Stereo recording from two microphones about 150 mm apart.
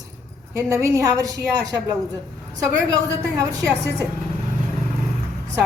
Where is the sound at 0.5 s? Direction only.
20° right (ahead or behind).